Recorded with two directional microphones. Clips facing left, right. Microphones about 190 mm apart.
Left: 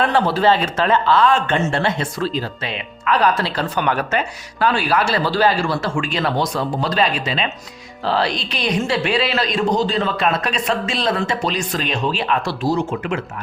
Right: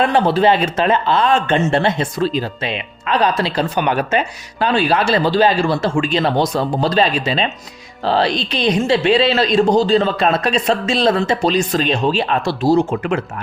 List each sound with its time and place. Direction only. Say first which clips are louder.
0.0 s speech: right 3 dB; 15° right (ahead or behind); by 13.1 s 35° right (ahead or behind)